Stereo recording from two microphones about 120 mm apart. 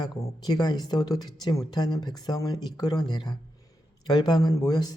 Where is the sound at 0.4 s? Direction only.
35° left (ahead or behind).